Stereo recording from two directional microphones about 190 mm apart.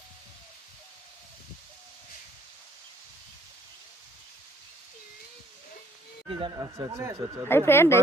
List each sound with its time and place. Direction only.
6.2 s speech: 20° right (ahead or behind)
7.4 s speech: 10° left (ahead or behind)